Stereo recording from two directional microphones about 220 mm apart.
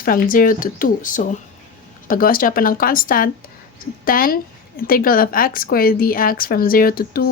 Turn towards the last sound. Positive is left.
turn(degrees=45)  # may be behind; listen again after turning